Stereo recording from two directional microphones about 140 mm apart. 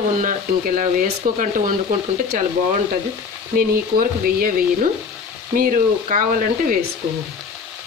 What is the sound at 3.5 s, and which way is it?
Speech, 85° right.